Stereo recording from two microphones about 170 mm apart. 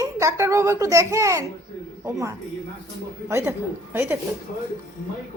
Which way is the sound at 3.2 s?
15° right (ahead or behind).